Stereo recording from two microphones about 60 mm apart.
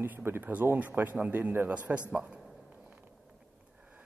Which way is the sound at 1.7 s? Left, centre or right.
Right.